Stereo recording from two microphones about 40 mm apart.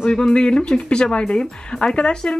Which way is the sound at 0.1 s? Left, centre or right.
Left.